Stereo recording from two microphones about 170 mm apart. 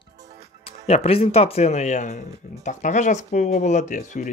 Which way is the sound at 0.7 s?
35° left (ahead or behind).